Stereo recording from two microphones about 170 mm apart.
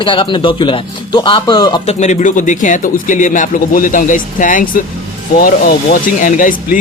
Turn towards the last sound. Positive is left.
turn(degrees=50)  # may be behind; listen again after turning